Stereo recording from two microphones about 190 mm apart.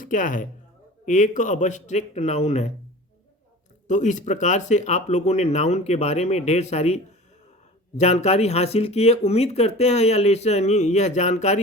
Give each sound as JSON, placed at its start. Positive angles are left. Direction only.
{"t": 0.0, "sound": "speech", "side_deg": 45}
{"t": 3.8, "sound": "speech", "side_deg": 40}